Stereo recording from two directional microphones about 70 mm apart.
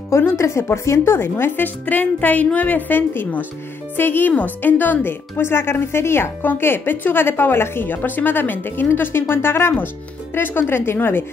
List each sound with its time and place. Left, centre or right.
0.1 s a woman's voice: left